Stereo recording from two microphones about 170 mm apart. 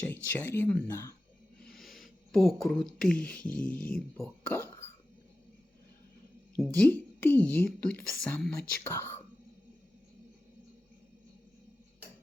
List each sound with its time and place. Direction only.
0.0 s speech: 10° left (ahead or behind)
1.6 s speech: centre (ahead or behind)
3.7 s speech: 55° left (ahead or behind)
4.2 s a sound: 10° left (ahead or behind)
6.6 s a woman's voice: 5° left (ahead or behind)